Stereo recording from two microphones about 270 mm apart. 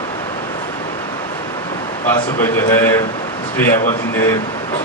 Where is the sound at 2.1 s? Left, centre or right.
Centre.